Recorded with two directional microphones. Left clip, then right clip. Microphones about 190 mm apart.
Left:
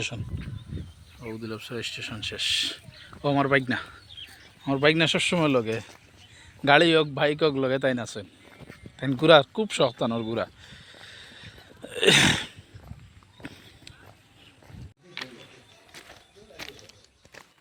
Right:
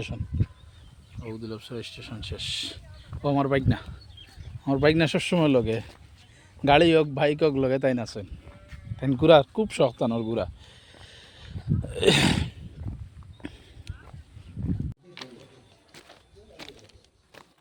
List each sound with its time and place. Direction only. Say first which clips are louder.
0.0 s speech: left 3 dB; centre (ahead or behind)
4.6 s a man's voice: even; 20° right (ahead or behind)
8.7 s a sound: right 1 dB; 15° right (ahead or behind)
9.2 s speech: even; 15° right (ahead or behind)
13.4 s clip-clop: right 1 dB; 25° right (ahead or behind)
15.9 s a sound: left 3 dB; centre (ahead or behind)